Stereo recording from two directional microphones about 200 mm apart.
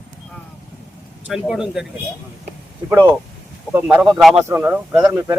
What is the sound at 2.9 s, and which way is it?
Speech, 10° right (ahead or behind).